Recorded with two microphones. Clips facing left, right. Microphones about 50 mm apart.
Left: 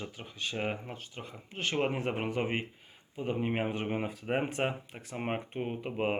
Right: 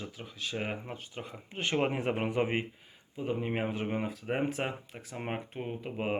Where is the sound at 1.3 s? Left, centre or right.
Centre.